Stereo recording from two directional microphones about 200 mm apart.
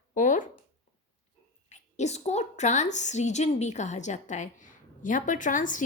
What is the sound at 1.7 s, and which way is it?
A woman's voice, 35° left (ahead or behind).